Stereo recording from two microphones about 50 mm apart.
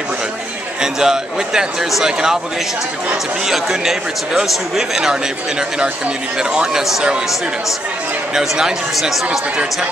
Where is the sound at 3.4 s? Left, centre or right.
Centre.